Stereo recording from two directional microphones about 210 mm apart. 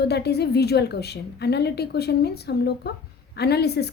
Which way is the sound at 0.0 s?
50° left (ahead or behind).